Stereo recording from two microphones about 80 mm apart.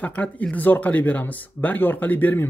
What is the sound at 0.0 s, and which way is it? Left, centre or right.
Speech, centre.